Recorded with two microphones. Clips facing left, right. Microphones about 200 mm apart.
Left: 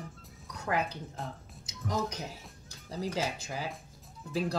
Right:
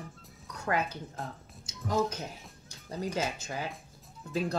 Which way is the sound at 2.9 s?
20° right (ahead or behind).